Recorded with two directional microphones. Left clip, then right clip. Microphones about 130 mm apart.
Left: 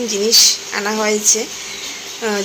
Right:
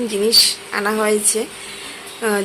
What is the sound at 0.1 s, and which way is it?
Speech, 15° right (ahead or behind).